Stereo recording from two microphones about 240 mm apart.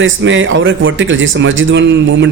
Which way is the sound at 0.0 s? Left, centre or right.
Right.